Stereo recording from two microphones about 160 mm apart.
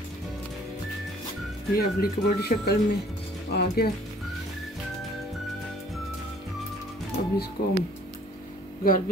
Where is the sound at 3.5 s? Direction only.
75° left (ahead or behind).